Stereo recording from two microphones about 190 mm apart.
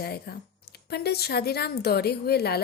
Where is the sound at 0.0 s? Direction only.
55° left (ahead or behind).